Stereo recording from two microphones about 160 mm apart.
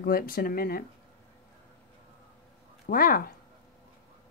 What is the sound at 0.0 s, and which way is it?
Speech, 65° left (ahead or behind).